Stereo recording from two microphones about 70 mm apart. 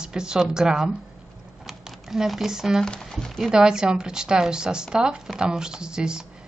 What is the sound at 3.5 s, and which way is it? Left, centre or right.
Speech, centre.